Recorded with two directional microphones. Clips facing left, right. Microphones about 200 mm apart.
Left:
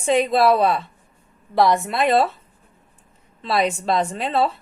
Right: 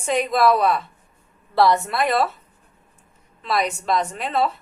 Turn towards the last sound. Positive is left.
turn(degrees=30)  # may be behind; listen again after turning